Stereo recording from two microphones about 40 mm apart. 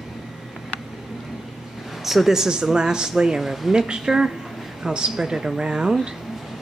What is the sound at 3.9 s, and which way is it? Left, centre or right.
Speech, centre.